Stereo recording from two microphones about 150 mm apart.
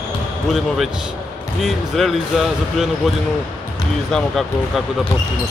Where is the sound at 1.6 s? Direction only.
Centre (ahead or behind).